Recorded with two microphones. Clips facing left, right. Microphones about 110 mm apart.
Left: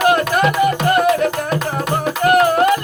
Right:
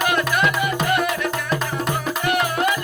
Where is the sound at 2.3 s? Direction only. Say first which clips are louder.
Left 9 dB; 45° left (ahead or behind).